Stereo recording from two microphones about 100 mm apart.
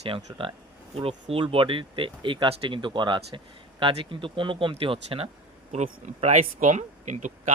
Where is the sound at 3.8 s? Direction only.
60° right (ahead or behind).